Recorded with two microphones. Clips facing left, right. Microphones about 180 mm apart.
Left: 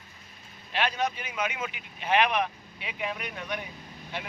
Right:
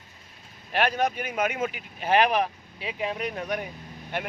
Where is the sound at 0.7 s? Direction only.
50° right (ahead or behind).